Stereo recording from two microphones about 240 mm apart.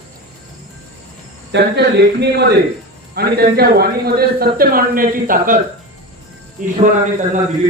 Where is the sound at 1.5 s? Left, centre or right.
Right.